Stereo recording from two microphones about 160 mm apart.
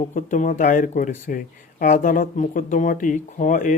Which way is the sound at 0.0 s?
50° left (ahead or behind).